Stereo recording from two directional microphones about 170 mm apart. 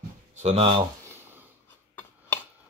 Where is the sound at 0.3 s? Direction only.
40° right (ahead or behind).